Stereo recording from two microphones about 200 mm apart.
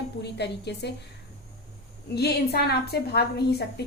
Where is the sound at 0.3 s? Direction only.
55° left (ahead or behind).